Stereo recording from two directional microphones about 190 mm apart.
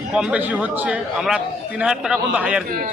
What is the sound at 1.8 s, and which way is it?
Speech, 5° right (ahead or behind).